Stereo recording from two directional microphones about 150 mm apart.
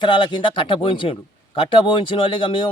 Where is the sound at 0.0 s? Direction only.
30° left (ahead or behind).